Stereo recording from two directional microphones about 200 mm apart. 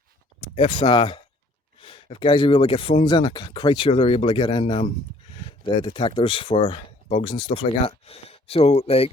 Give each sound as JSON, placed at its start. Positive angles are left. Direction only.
{"t": 0.5, "sound": "speech", "side_deg": 25}